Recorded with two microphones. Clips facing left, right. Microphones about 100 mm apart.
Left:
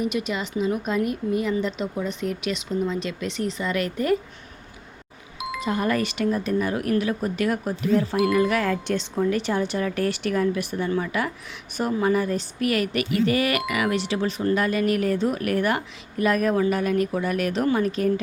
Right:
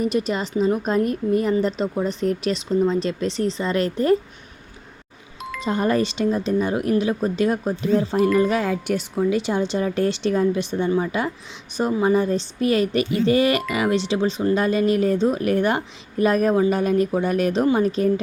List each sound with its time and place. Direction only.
0.0 s a woman's voice: 35° right (ahead or behind)
5.5 s speech: 30° right (ahead or behind)
8.7 s speech: 10° right (ahead or behind); by 18.1 s 30° right (ahead or behind)